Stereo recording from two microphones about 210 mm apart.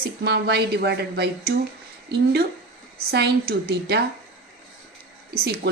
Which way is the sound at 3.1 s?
50° right (ahead or behind).